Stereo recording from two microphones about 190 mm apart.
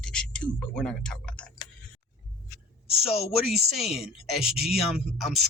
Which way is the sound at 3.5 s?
Centre (ahead or behind).